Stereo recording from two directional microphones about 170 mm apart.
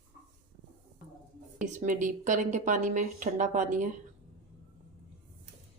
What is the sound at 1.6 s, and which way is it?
A woman's voice, 50° right (ahead or behind).